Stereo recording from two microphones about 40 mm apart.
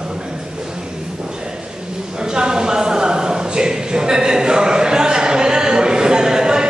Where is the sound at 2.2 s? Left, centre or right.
Centre.